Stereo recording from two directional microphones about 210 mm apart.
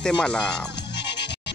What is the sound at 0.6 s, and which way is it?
Music, 55° left (ahead or behind).